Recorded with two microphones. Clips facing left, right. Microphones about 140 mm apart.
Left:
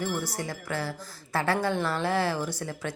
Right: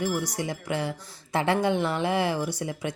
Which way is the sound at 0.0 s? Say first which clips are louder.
Right 3 dB; 10° right (ahead or behind).